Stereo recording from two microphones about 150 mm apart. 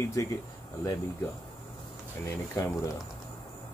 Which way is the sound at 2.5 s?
20° left (ahead or behind).